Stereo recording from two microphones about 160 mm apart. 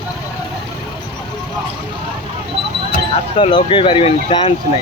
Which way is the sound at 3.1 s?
30° left (ahead or behind).